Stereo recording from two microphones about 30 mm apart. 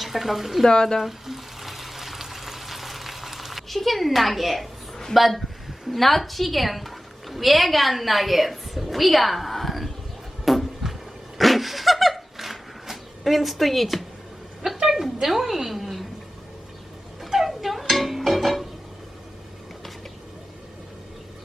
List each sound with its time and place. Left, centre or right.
0.0 s speech: centre
0.7 s speech: left
0.9 s water: centre
5.6 s a woman's voice: centre
10.4 s a sound: centre
14.6 s a sound: centre
17.2 s music: centre